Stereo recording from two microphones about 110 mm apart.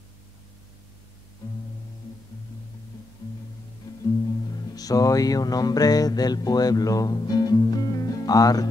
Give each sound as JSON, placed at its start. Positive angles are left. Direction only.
{"t": 3.9, "sound": "music", "side_deg": 35}